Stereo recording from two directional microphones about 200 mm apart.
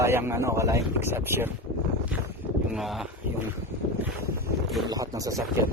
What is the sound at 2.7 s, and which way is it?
Speech, centre (ahead or behind).